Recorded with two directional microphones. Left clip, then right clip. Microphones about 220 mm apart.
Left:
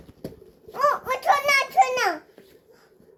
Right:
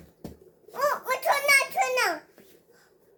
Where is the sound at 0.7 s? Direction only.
20° right (ahead or behind).